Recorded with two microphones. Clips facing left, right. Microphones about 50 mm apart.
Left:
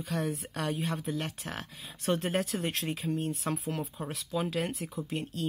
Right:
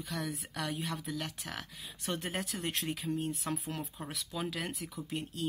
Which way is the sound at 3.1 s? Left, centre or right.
Centre.